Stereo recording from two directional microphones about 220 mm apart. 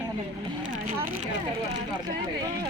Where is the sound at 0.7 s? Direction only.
40° right (ahead or behind).